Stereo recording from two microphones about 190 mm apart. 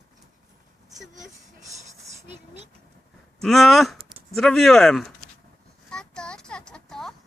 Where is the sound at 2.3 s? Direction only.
35° right (ahead or behind).